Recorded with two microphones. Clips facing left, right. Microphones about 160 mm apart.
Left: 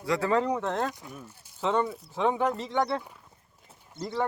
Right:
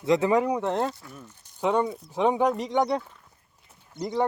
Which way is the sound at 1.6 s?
15° right (ahead or behind).